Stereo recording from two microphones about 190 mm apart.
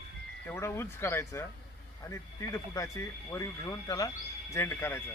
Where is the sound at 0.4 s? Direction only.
15° left (ahead or behind).